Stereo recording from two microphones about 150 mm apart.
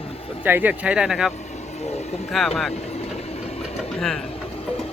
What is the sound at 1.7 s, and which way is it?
Vehicle, 45° left (ahead or behind).